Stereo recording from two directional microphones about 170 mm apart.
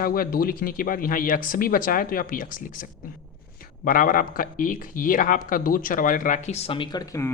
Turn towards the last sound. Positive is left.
turn(degrees=20)  # may be behind; listen again after turning